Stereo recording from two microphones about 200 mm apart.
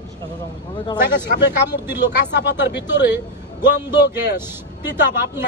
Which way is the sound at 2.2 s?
60° left (ahead or behind).